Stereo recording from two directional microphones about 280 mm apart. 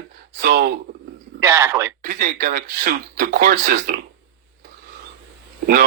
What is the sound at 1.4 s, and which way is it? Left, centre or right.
Speech, centre.